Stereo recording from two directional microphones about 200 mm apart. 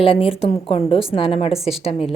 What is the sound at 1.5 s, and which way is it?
Speech, centre (ahead or behind).